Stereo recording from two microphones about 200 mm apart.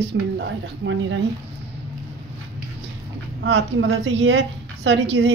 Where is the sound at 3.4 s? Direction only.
60° right (ahead or behind).